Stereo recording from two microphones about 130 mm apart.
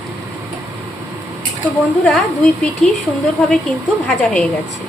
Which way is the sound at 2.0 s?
5° left (ahead or behind).